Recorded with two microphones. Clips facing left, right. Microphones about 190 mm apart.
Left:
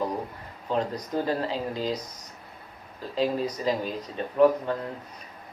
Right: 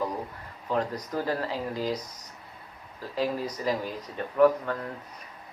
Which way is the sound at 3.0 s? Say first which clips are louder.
Left 3 dB; 25° left (ahead or behind).